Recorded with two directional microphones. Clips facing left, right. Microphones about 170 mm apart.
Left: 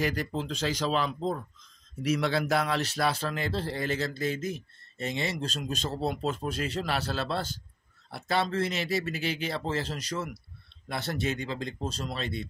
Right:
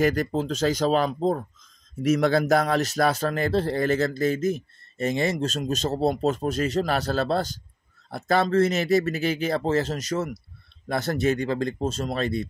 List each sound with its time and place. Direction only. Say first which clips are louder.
0.0 s speech: right 8 dB; 45° right (ahead or behind)